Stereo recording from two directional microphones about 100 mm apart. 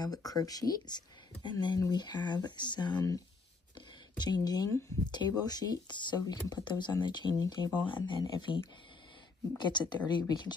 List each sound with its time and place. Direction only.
0.0 s speech: 40° left (ahead or behind)
4.2 s speech: 45° left (ahead or behind)
9.6 s speech: 50° left (ahead or behind)